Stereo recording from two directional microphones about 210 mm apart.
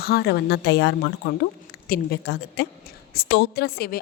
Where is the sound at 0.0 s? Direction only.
50° left (ahead or behind).